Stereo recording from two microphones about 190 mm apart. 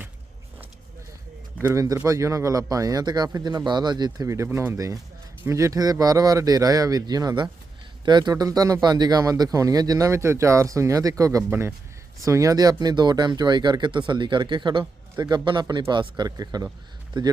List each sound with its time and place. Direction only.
1.6 s speech: 15° right (ahead or behind)